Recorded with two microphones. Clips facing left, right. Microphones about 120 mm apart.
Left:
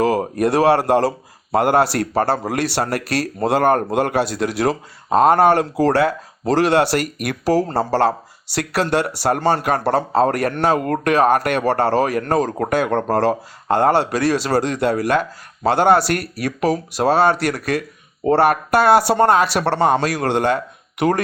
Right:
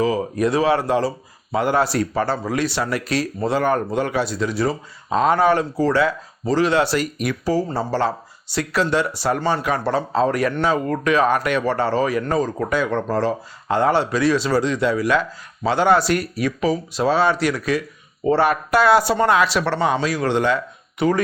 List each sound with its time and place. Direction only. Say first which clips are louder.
0.0 s speech: left 2 dB; 60° left (ahead or behind); by 4.8 s 85° left
5.0 s speech: left 4 dB; 55° left (ahead or behind)
13.1 s speech: left 4 dB; 70° left (ahead or behind)
13.7 s speech: left 2 dB; 55° left (ahead or behind)
21.0 s speech: left 1 dB; 75° left (ahead or behind)